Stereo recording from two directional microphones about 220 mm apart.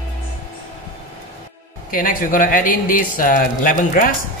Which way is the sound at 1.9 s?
40° left (ahead or behind).